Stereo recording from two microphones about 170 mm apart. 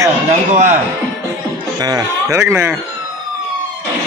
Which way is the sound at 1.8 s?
20° right (ahead or behind).